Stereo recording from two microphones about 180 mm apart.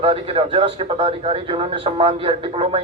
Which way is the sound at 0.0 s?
30° right (ahead or behind).